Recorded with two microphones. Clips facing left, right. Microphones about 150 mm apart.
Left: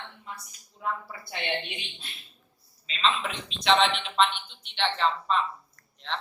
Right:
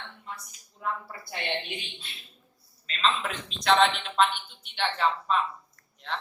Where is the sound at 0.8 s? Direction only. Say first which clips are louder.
Left 1 dB; centre (ahead or behind).